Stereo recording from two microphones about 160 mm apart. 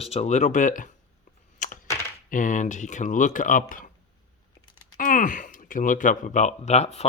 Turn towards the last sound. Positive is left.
turn(degrees=40)  # may be behind; listen again after turning